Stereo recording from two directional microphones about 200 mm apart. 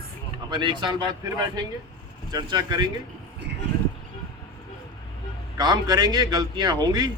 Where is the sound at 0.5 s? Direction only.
25° right (ahead or behind).